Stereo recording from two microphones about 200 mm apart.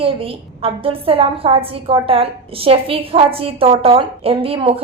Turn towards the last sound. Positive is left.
turn(degrees=-25)  # may be behind; listen again after turning